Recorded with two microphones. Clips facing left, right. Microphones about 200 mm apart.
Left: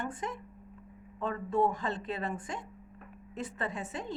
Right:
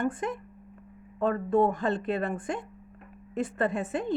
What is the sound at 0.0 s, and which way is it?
A woman's voice, 55° right (ahead or behind).